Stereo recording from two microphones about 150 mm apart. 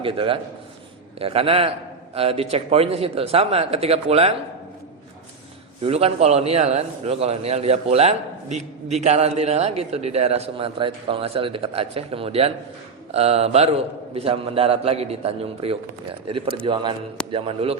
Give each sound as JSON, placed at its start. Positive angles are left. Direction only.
{"t": 0.0, "sound": "a man's voice", "side_deg": -35}
{"t": 5.8, "sound": "a man's voice", "side_deg": -40}